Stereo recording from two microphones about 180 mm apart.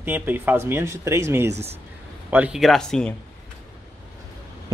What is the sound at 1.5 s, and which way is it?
Speech, 35° right (ahead or behind).